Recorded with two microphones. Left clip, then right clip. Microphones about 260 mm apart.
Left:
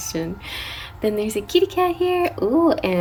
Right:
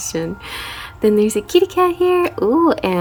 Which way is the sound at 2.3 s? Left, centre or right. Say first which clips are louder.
Right 4 dB; right.